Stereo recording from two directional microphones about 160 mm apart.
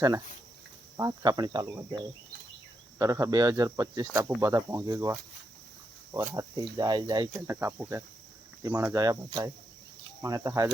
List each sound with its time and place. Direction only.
0.9 s speech: 25° right (ahead or behind)
3.0 s speech: 20° right (ahead or behind)
7.4 s cricket: 15° right (ahead or behind)
8.6 s speech: 20° right (ahead or behind)